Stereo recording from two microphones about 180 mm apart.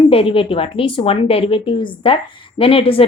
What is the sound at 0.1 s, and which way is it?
A woman's voice, 30° left (ahead or behind).